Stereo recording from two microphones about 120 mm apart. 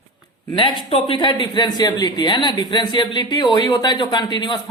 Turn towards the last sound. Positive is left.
turn(degrees=40)  # may be behind; listen again after turning